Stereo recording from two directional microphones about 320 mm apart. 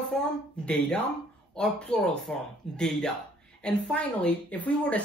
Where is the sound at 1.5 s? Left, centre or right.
Centre.